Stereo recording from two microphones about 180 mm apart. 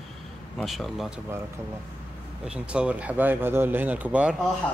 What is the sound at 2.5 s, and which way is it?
Speech, 5° right (ahead or behind).